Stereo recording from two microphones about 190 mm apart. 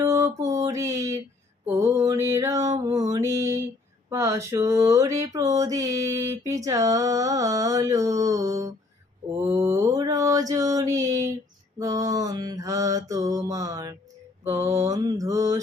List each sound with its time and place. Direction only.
0.0 s mantra: 15° right (ahead or behind)
2.7 s music: 20° right (ahead or behind)
3.1 s mantra: 15° right (ahead or behind)
4.1 s a sound: 15° right (ahead or behind)
9.5 s mantra: 15° right (ahead or behind)
11.8 s a sound: 20° right (ahead or behind)